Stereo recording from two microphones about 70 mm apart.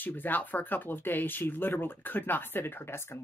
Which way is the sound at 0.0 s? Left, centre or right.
Left.